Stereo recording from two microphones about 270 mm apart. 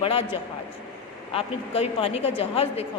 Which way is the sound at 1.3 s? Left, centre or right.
Left.